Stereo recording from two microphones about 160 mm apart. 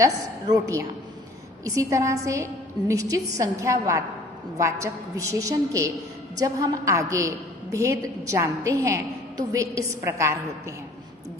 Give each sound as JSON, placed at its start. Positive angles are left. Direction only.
{"t": 0.0, "sound": "a woman's voice", "side_deg": -20}